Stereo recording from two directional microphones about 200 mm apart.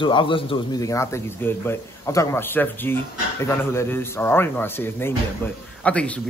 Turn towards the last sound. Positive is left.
turn(degrees=5)  # may be behind; listen again after turning